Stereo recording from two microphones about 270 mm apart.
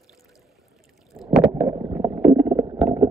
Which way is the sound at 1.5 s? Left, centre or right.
Centre.